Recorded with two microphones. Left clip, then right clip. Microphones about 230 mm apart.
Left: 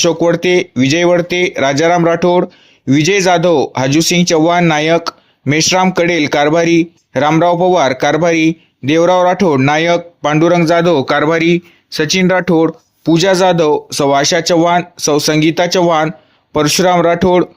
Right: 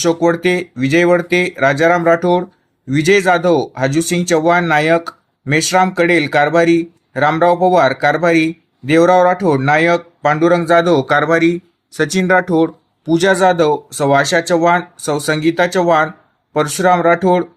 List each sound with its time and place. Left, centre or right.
0.0 s speech: left